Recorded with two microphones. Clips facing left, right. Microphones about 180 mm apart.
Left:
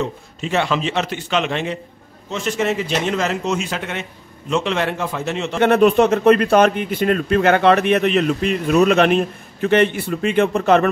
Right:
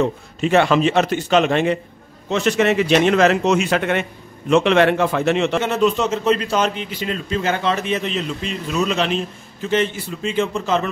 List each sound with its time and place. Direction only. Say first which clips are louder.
0.4 s a man's voice: right 5 dB; 55° right (ahead or behind)
2.2 s a man's voice: right 4 dB; 70° right (ahead or behind)
5.6 s a man's voice: left 5 dB; 60° left (ahead or behind)